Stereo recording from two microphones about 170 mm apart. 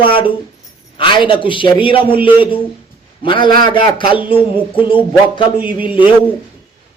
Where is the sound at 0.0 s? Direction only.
30° left (ahead or behind).